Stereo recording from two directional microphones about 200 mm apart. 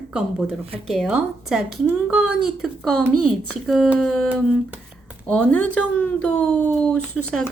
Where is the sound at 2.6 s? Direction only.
Centre (ahead or behind).